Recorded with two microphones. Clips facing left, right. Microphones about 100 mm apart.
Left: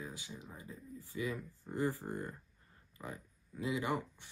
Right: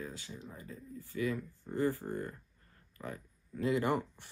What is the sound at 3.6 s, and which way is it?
Speech, 5° left (ahead or behind).